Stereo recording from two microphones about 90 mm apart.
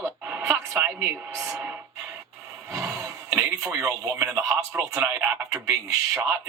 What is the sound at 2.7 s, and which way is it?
Speech, 35° right (ahead or behind).